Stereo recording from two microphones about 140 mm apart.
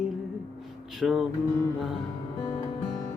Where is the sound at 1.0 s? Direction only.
5° right (ahead or behind).